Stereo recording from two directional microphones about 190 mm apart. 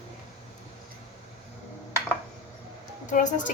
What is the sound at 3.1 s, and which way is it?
Speech, 40° left (ahead or behind).